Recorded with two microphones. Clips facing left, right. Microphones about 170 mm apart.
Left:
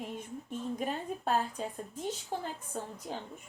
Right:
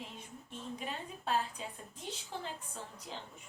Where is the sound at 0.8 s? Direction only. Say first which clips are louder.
Left 7 dB; 45° left (ahead or behind).